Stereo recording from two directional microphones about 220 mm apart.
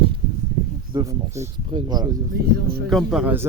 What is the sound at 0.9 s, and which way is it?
Speech, 15° right (ahead or behind).